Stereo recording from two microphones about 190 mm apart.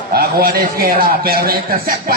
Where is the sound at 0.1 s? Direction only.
55° right (ahead or behind).